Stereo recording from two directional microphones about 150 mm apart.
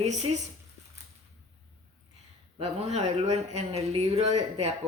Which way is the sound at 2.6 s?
45° right (ahead or behind).